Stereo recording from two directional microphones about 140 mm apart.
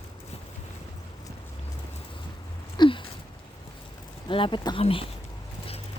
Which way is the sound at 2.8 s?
35° left (ahead or behind).